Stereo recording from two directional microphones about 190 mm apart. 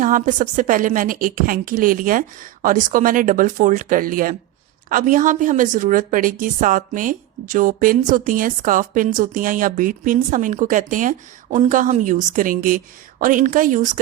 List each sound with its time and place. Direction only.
0.0 s a woman's voice: 45° right (ahead or behind)